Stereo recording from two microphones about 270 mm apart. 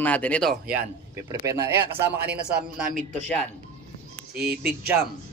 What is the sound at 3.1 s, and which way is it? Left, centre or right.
Speech, centre.